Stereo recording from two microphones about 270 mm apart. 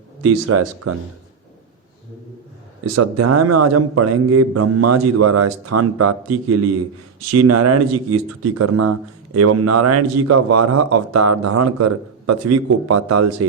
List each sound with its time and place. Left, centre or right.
0.2 s a man's voice: right
2.8 s a man's voice: right